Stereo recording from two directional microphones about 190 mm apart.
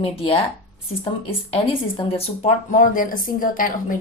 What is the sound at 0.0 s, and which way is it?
Speech, 30° left (ahead or behind).